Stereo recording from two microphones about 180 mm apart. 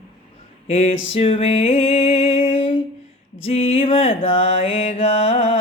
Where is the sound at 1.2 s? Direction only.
30° left (ahead or behind).